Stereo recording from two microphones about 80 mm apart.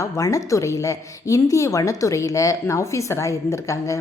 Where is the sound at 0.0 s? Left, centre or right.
Left.